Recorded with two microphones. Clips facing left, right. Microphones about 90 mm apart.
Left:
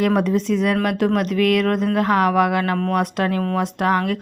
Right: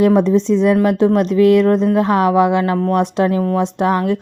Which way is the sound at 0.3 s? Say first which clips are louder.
Right 6 dB; 25° right (ahead or behind).